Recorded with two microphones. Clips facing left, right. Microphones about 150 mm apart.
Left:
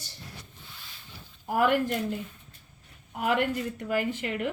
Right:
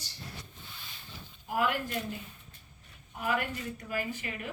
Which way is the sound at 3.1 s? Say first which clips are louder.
Left 6 dB; 70° left (ahead or behind).